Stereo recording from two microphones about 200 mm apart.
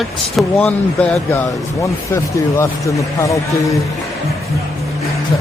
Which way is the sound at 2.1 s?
15° left (ahead or behind).